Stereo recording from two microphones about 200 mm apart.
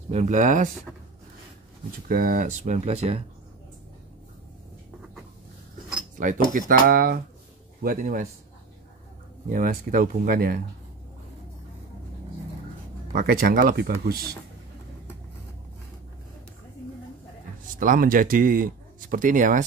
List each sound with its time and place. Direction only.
0.1 s speech: 35° right (ahead or behind)
2.0 s speech: 45° right (ahead or behind)
6.1 s speech: 40° right (ahead or behind)
9.5 s speech: 40° right (ahead or behind)
13.1 s speech: 45° right (ahead or behind)
17.7 s speech: 40° right (ahead or behind)